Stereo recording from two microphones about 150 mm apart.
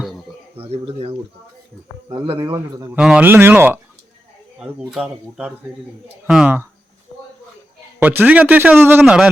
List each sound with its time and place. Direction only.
0.5 s speech: 40° right (ahead or behind)
2.4 s a man's voice: 20° right (ahead or behind)
2.9 s a man's voice: 10° right (ahead or behind)
4.9 s speech: 5° right (ahead or behind)
7.9 s a man's voice: 15° right (ahead or behind)